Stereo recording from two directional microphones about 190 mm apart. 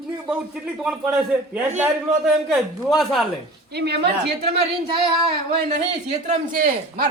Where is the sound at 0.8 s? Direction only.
5° right (ahead or behind).